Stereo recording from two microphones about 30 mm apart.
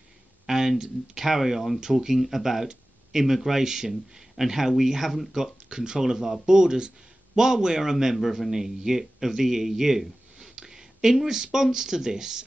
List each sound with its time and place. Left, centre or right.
0.5 s speech: centre
1.8 s speech: centre
5.4 s a man's voice: right